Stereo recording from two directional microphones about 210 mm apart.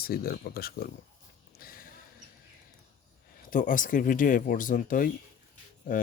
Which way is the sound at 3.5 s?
40° left (ahead or behind).